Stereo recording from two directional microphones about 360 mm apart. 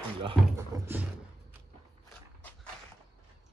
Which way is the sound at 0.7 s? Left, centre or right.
Centre.